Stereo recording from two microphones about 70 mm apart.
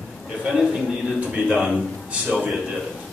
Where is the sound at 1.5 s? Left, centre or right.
Centre.